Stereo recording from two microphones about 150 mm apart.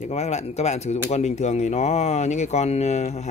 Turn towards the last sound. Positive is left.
turn(degrees=50)  # may be behind; listen again after turning